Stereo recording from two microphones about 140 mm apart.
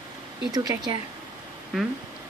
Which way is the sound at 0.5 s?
30° right (ahead or behind).